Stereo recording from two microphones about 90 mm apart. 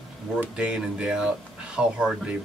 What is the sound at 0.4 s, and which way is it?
Speech, 10° right (ahead or behind).